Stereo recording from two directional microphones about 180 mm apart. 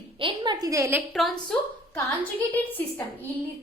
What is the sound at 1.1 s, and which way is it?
Speech, centre (ahead or behind).